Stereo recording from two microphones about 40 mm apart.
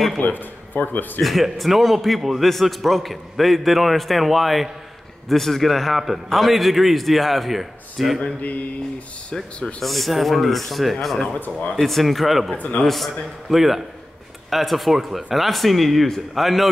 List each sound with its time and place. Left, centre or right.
0.2 s a man's voice: left
1.2 s a man's voice: centre
8.4 s a sound: left
9.8 s a man's voice: centre
11.3 s a man's voice: left
11.7 s a man's voice: centre
12.5 s a sound: left
12.8 s a man's voice: centre